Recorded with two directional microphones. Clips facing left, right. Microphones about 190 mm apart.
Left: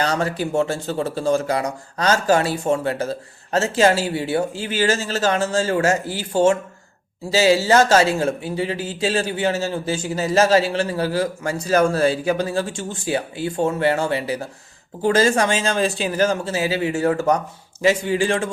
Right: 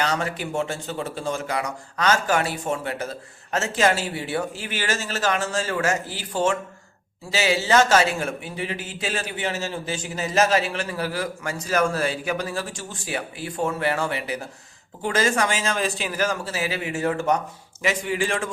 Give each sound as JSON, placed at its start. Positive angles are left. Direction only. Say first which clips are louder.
{"t": 0.0, "sound": "speech", "louder": "left 4 dB", "side_deg": 35}